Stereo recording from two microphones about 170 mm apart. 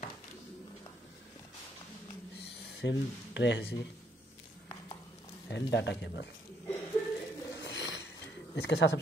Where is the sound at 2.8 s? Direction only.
90° left.